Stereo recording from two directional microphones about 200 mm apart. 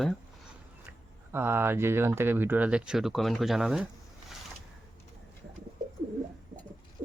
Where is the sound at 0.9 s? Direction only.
10° right (ahead or behind).